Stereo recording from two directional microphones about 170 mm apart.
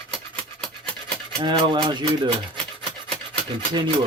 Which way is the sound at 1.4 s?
25° right (ahead or behind).